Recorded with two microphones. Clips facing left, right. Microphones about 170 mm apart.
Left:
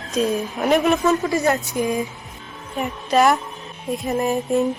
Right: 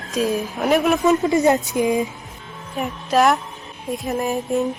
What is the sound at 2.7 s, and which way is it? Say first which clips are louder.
A woman's voice: even; centre (ahead or behind).